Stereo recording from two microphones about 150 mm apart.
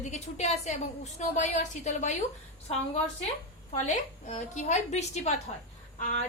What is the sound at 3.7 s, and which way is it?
A woman's voice, 50° left (ahead or behind).